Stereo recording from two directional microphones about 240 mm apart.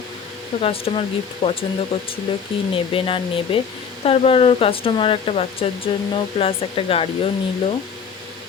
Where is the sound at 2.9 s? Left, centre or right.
Left.